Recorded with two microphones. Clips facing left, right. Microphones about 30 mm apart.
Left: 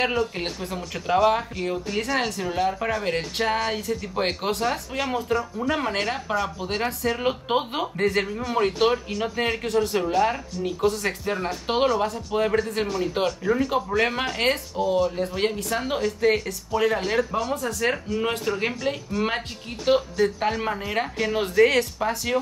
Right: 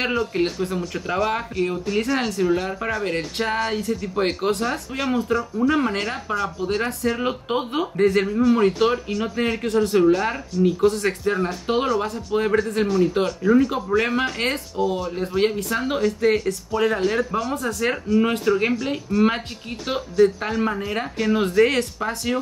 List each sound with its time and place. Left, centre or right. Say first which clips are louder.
0.0 s speech: right 2 dB; centre
7.8 s speech: right 4 dB; centre
11.6 s speech: left 2 dB; centre
11.9 s speech: right 2 dB; centre